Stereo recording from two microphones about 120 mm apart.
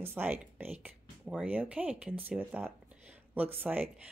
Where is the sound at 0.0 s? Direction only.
15° right (ahead or behind).